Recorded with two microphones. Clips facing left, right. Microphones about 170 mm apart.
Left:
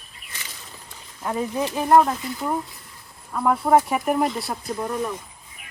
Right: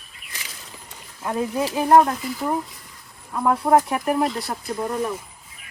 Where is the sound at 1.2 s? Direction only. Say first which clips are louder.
Right 1 dB; 5° right (ahead or behind).